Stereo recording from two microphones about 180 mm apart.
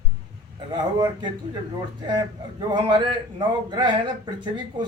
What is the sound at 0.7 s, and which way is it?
Speech, 25° right (ahead or behind).